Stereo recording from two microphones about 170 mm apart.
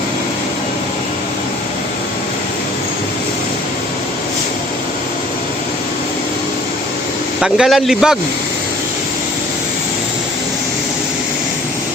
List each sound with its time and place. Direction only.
7.4 s a man's voice: 5° right (ahead or behind)